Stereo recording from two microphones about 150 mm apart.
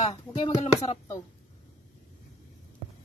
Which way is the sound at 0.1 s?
30° left (ahead or behind).